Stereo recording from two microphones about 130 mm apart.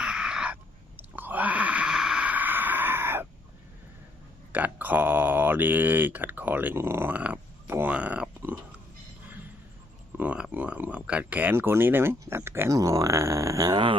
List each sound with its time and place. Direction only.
0.0 s a sound: 5° right (ahead or behind)
1.1 s wail: 15° right (ahead or behind)
4.5 s speech: 15° right (ahead or behind)
10.2 s speech: 10° right (ahead or behind); by 14.0 s 40° right (ahead or behind)